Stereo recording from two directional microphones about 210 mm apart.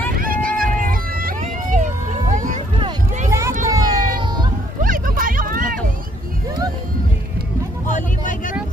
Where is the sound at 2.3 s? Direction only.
35° right (ahead or behind).